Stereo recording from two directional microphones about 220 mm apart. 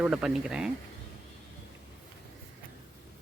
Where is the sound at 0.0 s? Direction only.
Centre (ahead or behind).